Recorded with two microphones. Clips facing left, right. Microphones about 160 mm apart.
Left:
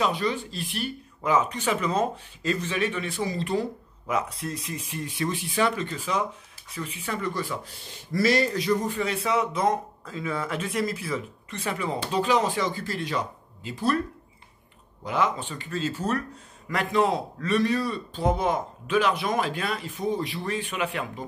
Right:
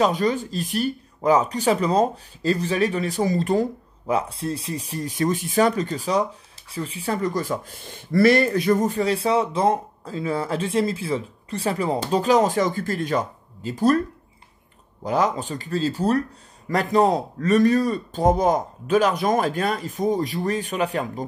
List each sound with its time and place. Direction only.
0.0 s speech: 45° right (ahead or behind)
4.1 s speech: 30° right (ahead or behind)
15.0 s speech: 40° right (ahead or behind)